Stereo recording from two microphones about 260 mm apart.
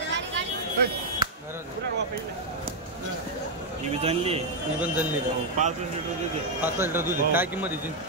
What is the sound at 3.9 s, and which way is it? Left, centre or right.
Speech, right.